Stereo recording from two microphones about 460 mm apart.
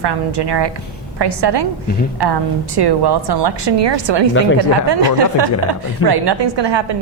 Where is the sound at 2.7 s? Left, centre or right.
Right.